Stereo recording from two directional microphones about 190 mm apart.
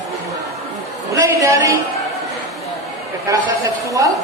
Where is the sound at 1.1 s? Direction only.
15° right (ahead or behind).